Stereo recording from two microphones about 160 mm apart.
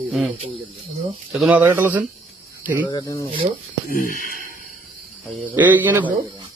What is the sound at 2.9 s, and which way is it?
Speech, 25° left (ahead or behind).